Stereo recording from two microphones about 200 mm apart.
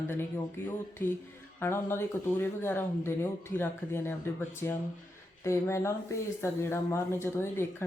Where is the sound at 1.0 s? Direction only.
10° left (ahead or behind).